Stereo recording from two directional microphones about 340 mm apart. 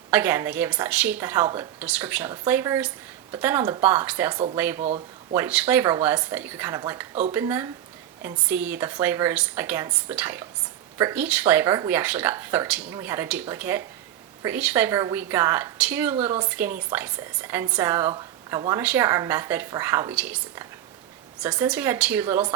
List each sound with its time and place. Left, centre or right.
0.1 s a woman's voice: centre
4.8 s speech: centre
5.3 s a woman's voice: centre